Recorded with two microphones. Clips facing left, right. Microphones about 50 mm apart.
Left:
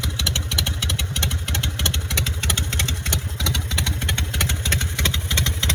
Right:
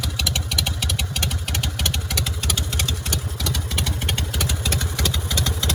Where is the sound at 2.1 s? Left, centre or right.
Left.